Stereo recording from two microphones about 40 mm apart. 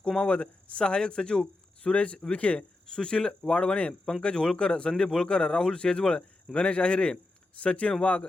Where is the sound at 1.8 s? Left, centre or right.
Left.